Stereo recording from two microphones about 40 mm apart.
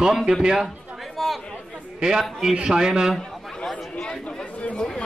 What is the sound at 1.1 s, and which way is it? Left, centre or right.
Chatter, centre.